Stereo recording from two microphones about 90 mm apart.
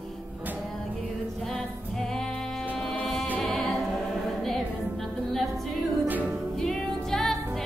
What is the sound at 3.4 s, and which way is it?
Music, centre (ahead or behind).